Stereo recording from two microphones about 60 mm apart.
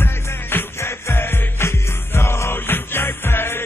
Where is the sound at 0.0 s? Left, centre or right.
Left.